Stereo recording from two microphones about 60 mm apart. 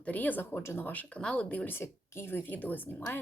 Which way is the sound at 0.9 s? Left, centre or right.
Left.